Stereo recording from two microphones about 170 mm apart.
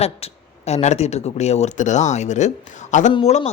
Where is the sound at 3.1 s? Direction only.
35° left (ahead or behind).